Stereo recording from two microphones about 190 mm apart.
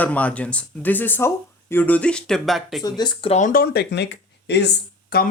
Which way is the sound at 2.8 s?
20° left (ahead or behind).